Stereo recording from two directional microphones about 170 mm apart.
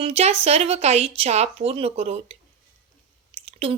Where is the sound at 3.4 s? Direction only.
35° right (ahead or behind).